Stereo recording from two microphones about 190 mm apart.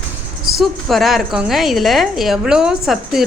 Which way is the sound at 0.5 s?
Centre (ahead or behind).